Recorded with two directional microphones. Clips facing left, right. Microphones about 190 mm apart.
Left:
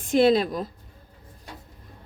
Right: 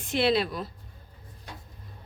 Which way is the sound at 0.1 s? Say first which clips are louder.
Left 6 dB; 45° left (ahead or behind).